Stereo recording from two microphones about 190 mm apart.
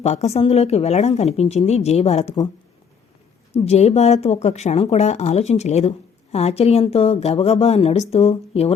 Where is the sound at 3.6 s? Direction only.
35° left (ahead or behind).